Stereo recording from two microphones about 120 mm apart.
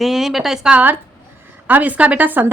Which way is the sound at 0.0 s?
Centre (ahead or behind).